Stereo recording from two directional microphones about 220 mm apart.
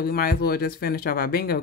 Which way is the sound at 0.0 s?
45° left (ahead or behind).